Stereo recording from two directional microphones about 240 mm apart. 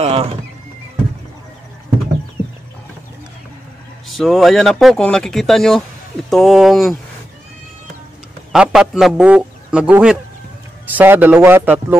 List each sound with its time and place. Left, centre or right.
0.0 s speech: right
4.2 s speech: centre
8.5 s a man's voice: centre